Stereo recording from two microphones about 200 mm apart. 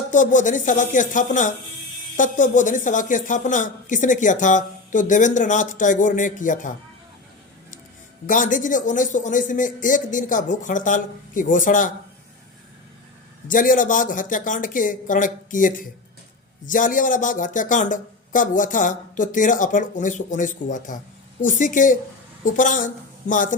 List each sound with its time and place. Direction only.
0.1 s speech: 40° left (ahead or behind)
8.3 s speech: 40° left (ahead or behind)
13.5 s speech: 40° left (ahead or behind)